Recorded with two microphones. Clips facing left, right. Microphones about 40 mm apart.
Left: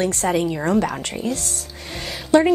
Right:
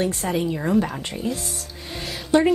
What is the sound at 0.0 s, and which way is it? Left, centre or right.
Speech, left.